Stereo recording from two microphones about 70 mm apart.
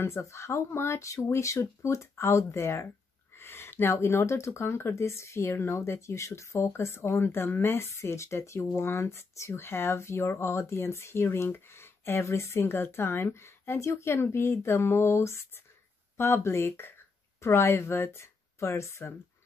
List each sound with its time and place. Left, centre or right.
0.0 s speech: left